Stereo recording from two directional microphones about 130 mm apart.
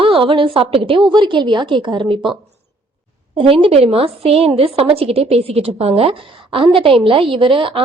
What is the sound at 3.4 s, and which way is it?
A woman's voice, 45° right (ahead or behind).